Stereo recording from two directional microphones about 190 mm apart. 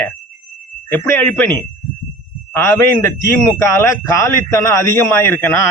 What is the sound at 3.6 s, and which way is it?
A man's voice, 15° left (ahead or behind).